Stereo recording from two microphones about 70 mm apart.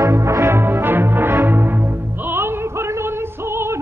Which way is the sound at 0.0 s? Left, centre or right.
Right.